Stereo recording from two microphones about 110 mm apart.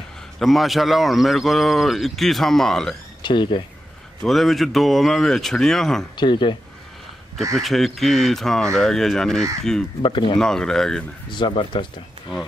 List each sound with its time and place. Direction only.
0.4 s speech: centre (ahead or behind)
3.2 s speech: 45° left (ahead or behind)
4.2 s speech: centre (ahead or behind)
6.1 s speech: 45° left (ahead or behind)
7.5 s speech: centre (ahead or behind)
10.0 s speech: 50° left (ahead or behind)
10.4 s speech: 5° left (ahead or behind)
11.2 s speech: 45° left (ahead or behind)